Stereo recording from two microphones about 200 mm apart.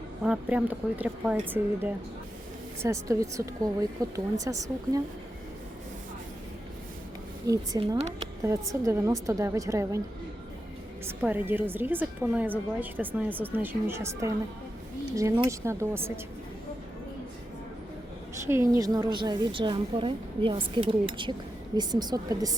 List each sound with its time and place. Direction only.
0.2 s a woman's voice: 5° right (ahead or behind)
7.4 s a woman's voice: 15° right (ahead or behind)
7.8 s speech: 30° right (ahead or behind)
8.7 s a woman's voice: 15° right (ahead or behind)
11.0 s a woman's voice: 10° right (ahead or behind)
18.4 s a woman's voice: 15° right (ahead or behind)